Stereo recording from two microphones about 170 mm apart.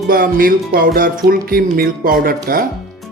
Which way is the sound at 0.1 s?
55° right (ahead or behind).